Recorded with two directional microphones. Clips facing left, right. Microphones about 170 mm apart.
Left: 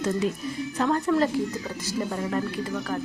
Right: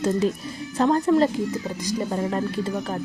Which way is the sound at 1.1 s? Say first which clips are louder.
Right 4 dB; 20° right (ahead or behind).